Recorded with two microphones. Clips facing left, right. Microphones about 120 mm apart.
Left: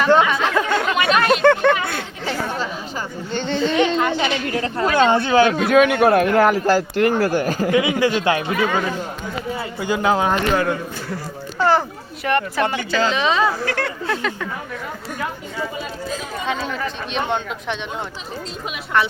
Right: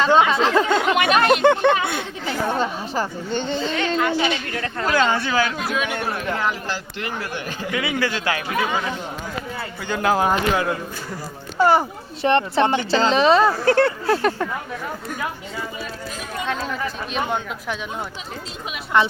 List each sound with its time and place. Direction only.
0.0 s a sound: 25° right (ahead or behind)
0.7 s chatter: 15° right (ahead or behind)
1.4 s speech: 20° right (ahead or behind)
3.8 s speech: 20° left (ahead or behind)
5.5 s a man's voice: 55° left (ahead or behind); by 7.8 s 40° left (ahead or behind)
7.8 s speech: 20° left (ahead or behind)
10.0 s speech: centre (ahead or behind)
12.2 s speech: 25° right (ahead or behind)
16.5 s speech: centre (ahead or behind)
18.9 s speech: 20° right (ahead or behind)